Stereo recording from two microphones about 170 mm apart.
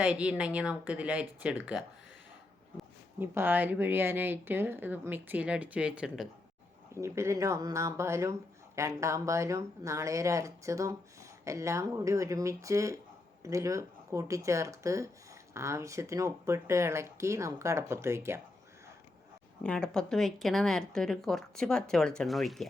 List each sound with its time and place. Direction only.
0.0 s speech: 5° right (ahead or behind)
3.2 s speech: 10° right (ahead or behind)
6.9 s speech: 15° right (ahead or behind)
19.6 s speech: 5° left (ahead or behind)